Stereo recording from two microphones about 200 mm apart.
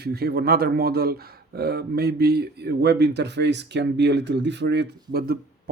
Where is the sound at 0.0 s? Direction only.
55° right (ahead or behind).